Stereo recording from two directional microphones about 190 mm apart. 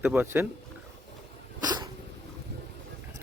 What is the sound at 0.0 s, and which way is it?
Speech, 10° right (ahead or behind).